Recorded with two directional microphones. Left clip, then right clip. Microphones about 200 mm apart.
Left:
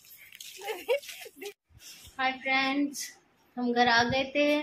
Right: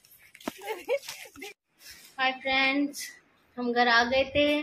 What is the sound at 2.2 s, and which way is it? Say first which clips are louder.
Child singing: right 2 dB; centre (ahead or behind).